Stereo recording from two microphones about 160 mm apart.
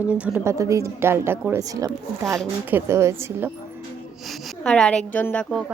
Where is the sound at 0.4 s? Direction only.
20° right (ahead or behind).